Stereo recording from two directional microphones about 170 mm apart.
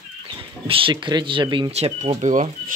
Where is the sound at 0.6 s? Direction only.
30° right (ahead or behind).